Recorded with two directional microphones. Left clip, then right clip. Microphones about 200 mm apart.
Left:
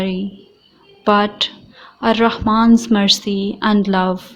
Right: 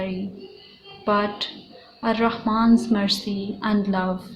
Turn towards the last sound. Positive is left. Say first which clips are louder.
# left 8 dB
turn(degrees=45)  # may be behind; listen again after turning